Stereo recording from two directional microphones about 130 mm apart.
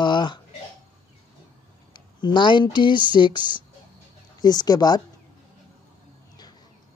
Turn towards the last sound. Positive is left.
turn(degrees=30)  # may be behind; listen again after turning